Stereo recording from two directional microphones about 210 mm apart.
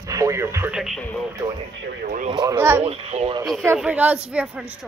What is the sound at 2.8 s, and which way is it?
Speech, 30° right (ahead or behind).